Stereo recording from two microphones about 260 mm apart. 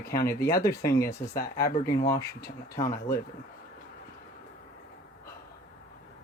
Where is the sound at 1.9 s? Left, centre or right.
Left.